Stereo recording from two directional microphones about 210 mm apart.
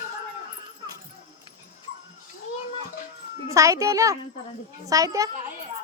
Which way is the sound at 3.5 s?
15° right (ahead or behind).